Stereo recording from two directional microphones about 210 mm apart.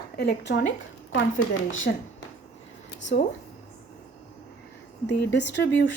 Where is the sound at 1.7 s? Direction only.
65° left (ahead or behind).